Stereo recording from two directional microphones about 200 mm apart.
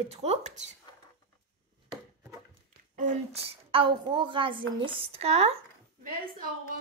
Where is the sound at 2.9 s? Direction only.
35° right (ahead or behind).